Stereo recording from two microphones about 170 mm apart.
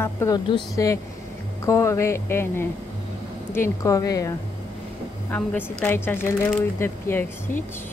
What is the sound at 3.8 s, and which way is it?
Speech, 20° left (ahead or behind).